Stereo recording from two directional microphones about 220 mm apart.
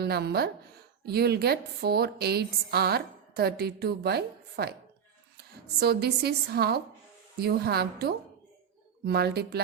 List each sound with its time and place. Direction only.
0.0 s a woman's voice: 45° right (ahead or behind)